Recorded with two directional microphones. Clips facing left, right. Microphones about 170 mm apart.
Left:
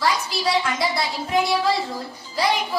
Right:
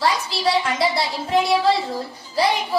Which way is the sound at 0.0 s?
30° right (ahead or behind).